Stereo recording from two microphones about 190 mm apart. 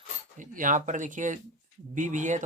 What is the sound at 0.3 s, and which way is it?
Speech, 45° right (ahead or behind).